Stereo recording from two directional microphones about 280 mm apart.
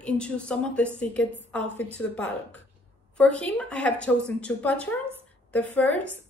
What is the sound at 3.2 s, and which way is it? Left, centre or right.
A woman's voice, centre.